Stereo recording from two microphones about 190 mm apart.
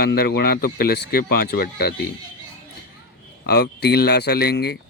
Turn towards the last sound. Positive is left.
turn(degrees=60)  # may be behind; listen again after turning